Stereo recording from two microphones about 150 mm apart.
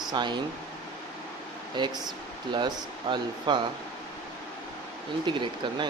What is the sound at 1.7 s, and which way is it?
Speech, 30° right (ahead or behind).